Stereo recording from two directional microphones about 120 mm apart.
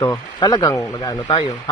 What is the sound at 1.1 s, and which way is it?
Speech, 45° left (ahead or behind).